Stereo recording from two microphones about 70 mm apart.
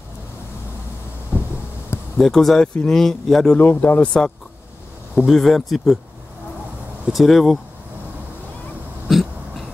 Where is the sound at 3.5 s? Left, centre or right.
Left.